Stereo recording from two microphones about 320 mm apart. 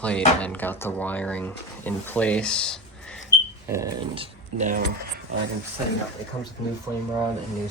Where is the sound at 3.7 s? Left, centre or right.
Centre.